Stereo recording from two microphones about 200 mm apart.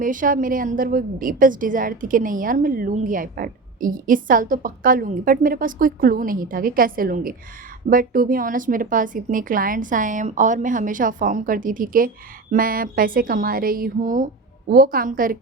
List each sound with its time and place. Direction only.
0.0 s a woman's voice: 40° right (ahead or behind)